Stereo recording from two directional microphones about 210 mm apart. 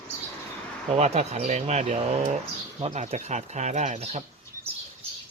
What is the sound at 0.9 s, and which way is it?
Speech, 30° right (ahead or behind).